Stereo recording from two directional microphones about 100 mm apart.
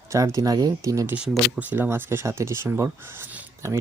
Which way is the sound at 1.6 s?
20° right (ahead or behind).